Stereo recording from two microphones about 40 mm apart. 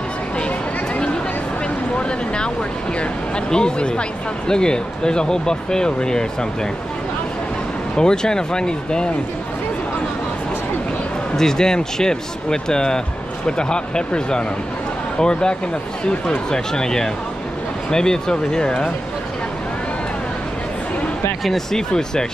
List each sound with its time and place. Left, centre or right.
2.0 s a sound: left
3.4 s speech: left
7.9 s speech: centre
11.3 s speech: centre
21.5 s speech: centre